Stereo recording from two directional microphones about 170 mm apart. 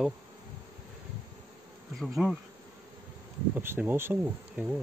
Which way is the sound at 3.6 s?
10° right (ahead or behind).